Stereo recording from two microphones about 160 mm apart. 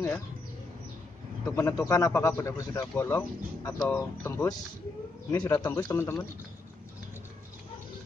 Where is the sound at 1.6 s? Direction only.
15° left (ahead or behind).